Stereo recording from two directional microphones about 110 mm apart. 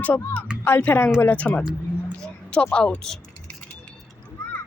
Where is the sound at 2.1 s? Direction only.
10° left (ahead or behind).